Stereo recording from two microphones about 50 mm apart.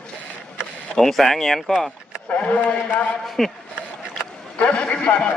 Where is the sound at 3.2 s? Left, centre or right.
Centre.